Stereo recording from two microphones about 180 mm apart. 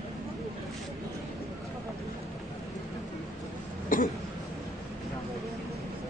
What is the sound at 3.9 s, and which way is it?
Cough, 50° left (ahead or behind).